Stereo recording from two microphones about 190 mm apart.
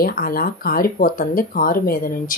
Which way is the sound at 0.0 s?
50° left (ahead or behind).